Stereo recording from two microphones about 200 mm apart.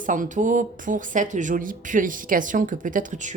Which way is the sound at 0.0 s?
40° right (ahead or behind).